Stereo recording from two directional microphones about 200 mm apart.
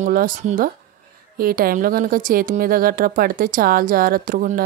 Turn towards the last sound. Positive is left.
turn(degrees=-45)  # may be behind; listen again after turning